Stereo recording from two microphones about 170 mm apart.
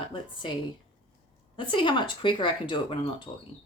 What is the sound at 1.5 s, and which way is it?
A woman's voice, 30° left (ahead or behind).